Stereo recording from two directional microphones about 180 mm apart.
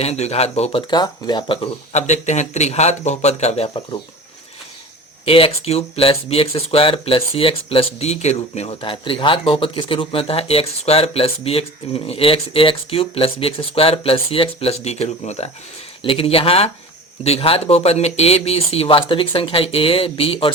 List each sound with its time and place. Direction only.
0.0 s speech: 35° left (ahead or behind)
5.2 s speech: 30° left (ahead or behind)